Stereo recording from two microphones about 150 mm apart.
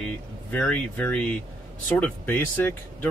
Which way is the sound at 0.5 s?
5° left (ahead or behind).